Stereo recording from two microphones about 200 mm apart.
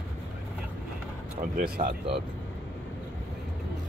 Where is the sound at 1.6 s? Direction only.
40° right (ahead or behind).